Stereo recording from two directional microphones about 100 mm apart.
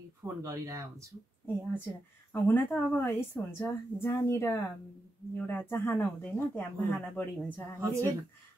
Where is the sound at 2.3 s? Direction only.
20° left (ahead or behind).